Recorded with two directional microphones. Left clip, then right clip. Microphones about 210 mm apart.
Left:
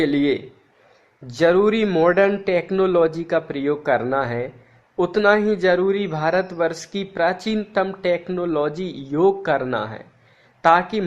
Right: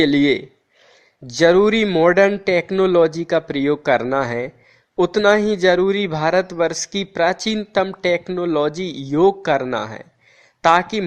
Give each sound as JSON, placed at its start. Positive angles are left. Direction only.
{"t": 0.0, "sound": "a man's voice", "side_deg": -35}